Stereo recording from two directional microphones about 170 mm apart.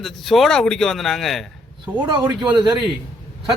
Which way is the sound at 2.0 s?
25° right (ahead or behind).